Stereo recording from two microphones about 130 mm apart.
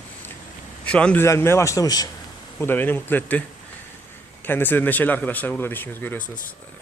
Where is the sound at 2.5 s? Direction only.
15° left (ahead or behind).